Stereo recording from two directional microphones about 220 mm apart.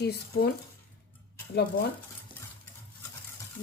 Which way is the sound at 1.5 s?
45° left (ahead or behind).